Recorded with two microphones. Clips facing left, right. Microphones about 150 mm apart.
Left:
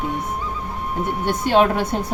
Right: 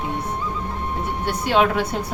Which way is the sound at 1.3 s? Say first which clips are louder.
Left 2 dB; 45° left (ahead or behind).